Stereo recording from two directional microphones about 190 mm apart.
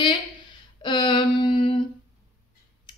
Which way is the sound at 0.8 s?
25° left (ahead or behind).